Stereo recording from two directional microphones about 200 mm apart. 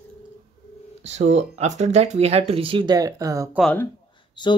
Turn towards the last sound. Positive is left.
turn(degrees=25)  # may be behind; listen again after turning